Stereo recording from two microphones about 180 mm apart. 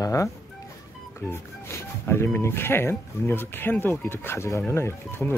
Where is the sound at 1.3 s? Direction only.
15° left (ahead or behind).